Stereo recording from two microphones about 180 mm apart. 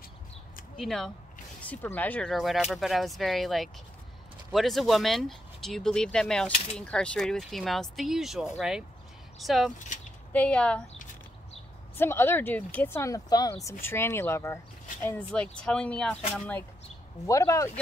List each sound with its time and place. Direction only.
0.7 s speech: centre (ahead or behind)
12.0 s speech: 15° left (ahead or behind)